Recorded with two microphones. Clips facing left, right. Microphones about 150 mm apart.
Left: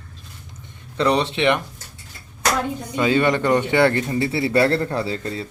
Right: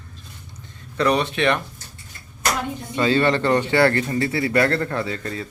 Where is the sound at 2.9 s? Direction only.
15° left (ahead or behind).